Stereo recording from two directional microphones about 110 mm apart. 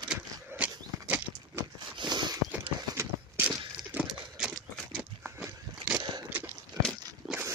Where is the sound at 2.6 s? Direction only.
15° right (ahead or behind).